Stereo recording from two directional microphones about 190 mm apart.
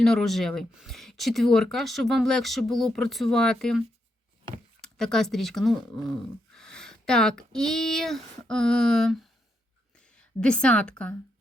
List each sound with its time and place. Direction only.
0.0 s a woman's voice: 5° left (ahead or behind)